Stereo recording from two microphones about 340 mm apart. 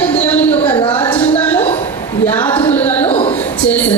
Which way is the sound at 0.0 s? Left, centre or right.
Centre.